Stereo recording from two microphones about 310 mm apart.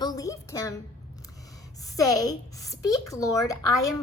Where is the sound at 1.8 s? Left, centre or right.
Centre.